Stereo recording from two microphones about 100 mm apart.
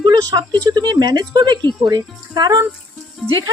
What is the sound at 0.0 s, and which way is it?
Speech, 45° right (ahead or behind).